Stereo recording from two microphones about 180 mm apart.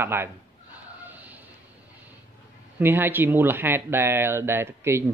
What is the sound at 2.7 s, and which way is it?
Speech, 10° right (ahead or behind).